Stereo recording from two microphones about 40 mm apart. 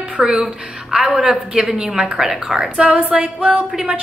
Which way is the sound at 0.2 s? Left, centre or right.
Centre.